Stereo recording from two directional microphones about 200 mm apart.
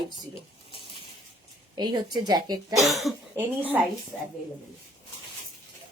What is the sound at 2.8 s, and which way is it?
Speech, centre (ahead or behind).